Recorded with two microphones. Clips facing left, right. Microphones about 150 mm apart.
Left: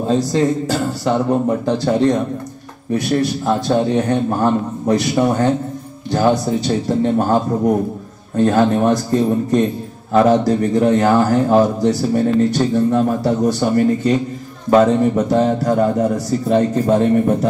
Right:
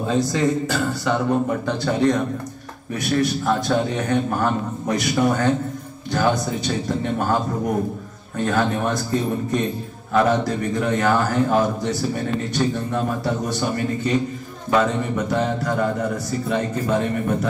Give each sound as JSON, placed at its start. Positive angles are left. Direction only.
{"t": 0.0, "sound": "a man's voice", "side_deg": 30}
{"t": 8.4, "sound": "a man's voice", "side_deg": 35}